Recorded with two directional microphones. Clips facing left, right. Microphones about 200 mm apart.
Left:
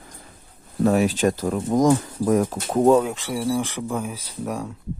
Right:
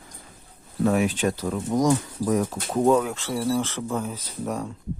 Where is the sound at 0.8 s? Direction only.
40° left (ahead or behind).